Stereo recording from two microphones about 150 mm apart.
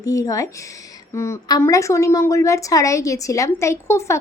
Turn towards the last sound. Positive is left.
turn(degrees=20)  # may be behind; listen again after turning